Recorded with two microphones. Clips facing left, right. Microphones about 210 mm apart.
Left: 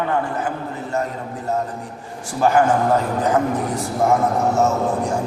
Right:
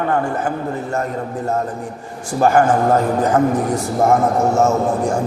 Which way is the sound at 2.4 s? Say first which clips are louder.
Right 2 dB; 45° right (ahead or behind).